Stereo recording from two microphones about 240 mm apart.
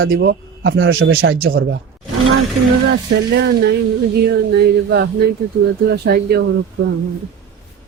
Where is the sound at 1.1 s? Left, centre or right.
Right.